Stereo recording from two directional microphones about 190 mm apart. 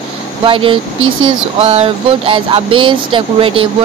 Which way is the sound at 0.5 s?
25° right (ahead or behind).